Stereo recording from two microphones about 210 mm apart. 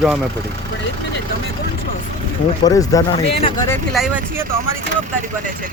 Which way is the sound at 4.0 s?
Centre (ahead or behind).